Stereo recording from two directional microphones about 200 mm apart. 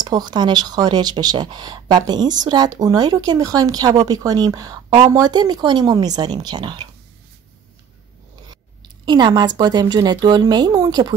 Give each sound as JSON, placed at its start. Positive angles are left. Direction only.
{"t": 0.0, "sound": "speech", "side_deg": -20}
{"t": 8.5, "sound": "speech", "side_deg": -20}